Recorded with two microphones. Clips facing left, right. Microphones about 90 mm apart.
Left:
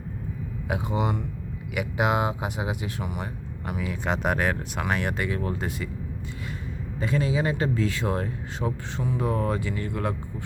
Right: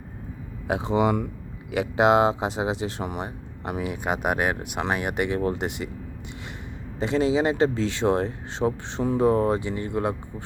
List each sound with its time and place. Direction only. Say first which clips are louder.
0.7 s speech: right 5 dB; 25° right (ahead or behind)
3.8 s speech: even; 10° right (ahead or behind)
7.0 s speech: right 4 dB; 25° right (ahead or behind)